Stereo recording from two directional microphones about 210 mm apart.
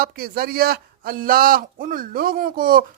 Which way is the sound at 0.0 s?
45° right (ahead or behind).